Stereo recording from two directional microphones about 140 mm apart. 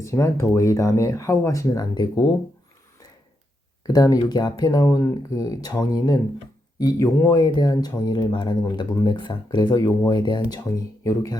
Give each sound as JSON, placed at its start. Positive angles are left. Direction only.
{"t": 0.0, "sound": "speech", "side_deg": 20}
{"t": 3.8, "sound": "speech", "side_deg": 25}